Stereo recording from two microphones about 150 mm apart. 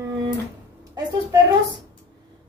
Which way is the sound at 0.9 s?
20° right (ahead or behind).